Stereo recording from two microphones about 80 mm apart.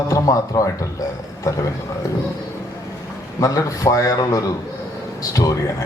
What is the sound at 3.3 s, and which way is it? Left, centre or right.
Speech, left.